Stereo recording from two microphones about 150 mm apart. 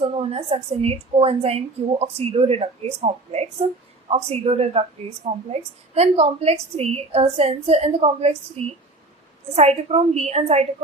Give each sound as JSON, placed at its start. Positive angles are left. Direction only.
{"t": 0.0, "sound": "a woman's voice", "side_deg": -40}